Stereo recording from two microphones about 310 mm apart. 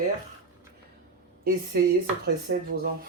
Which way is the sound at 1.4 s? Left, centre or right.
Right.